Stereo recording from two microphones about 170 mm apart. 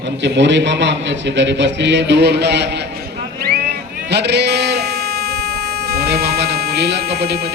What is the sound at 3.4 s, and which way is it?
Sheep, 70° right (ahead or behind).